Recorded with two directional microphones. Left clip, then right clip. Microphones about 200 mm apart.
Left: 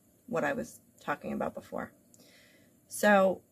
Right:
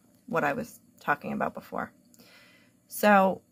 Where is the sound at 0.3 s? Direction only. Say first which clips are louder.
Right 4 dB; 10° left (ahead or behind).